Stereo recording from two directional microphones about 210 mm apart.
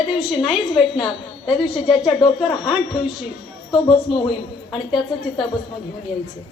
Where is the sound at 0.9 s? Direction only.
25° left (ahead or behind).